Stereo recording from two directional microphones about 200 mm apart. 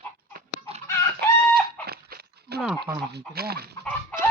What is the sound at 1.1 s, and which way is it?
Chicken, 50° right (ahead or behind).